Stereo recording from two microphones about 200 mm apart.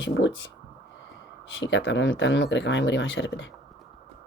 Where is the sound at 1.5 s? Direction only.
60° left (ahead or behind).